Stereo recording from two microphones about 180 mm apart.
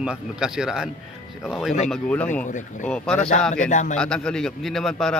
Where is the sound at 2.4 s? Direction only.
45° left (ahead or behind).